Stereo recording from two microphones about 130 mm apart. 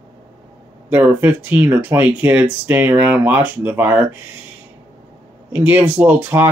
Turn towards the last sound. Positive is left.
turn(degrees=-15)  # may be behind; listen again after turning